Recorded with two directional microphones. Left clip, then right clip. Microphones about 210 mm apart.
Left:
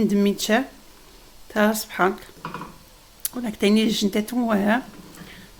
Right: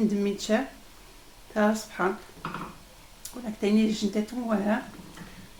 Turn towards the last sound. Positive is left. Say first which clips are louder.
# left 7 dB
turn(degrees=50)  # may be behind; listen again after turning